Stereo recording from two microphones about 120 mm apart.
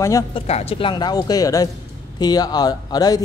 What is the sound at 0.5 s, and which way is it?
Speech, 60° left (ahead or behind).